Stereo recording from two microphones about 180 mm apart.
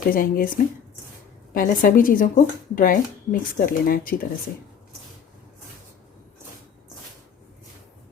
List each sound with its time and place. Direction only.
0.1 s speech: 50° left (ahead or behind)
1.5 s speech: 50° left (ahead or behind)